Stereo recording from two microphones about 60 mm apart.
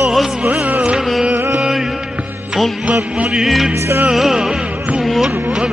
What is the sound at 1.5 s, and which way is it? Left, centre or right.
Music, centre.